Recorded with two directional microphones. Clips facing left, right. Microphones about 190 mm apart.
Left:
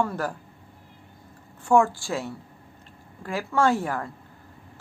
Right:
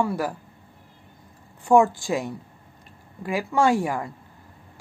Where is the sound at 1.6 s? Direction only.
15° right (ahead or behind).